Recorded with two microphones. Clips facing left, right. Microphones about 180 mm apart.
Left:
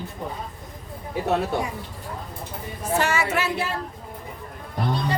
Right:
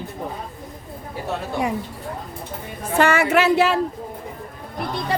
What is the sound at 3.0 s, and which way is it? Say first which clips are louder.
Speech: right 8 dB; 60° right (ahead or behind).